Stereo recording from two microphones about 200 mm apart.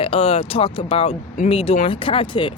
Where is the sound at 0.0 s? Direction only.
30° left (ahead or behind).